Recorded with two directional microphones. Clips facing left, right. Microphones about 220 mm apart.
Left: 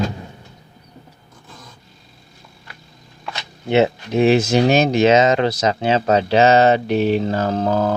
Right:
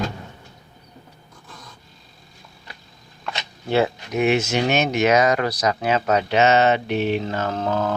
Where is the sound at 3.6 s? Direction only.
25° left (ahead or behind).